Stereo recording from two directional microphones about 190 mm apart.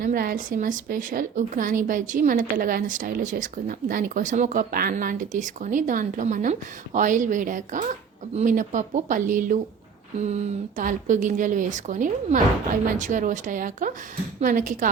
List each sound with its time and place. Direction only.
0.0 s a woman's voice: 50° right (ahead or behind)